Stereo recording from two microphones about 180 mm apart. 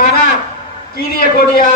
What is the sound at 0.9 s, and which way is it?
Speech, 55° left (ahead or behind).